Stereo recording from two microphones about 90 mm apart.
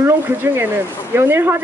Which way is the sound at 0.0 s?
25° right (ahead or behind).